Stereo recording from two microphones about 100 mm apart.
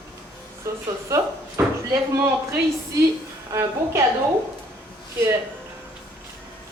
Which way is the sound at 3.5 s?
30° right (ahead or behind).